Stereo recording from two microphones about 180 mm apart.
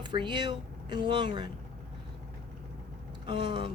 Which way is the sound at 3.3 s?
25° right (ahead or behind).